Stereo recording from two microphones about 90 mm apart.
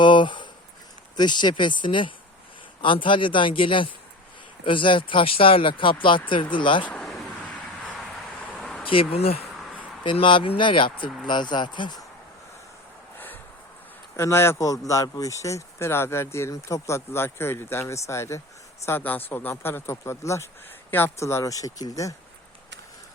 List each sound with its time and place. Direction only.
0.0 s speech: 65° left (ahead or behind)
8.5 s a sound: 5° left (ahead or behind)
8.8 s speech: 85° left
10.0 s speech: 65° left (ahead or behind)
13.1 s snort: 20° left (ahead or behind)
14.2 s speech: 30° left (ahead or behind)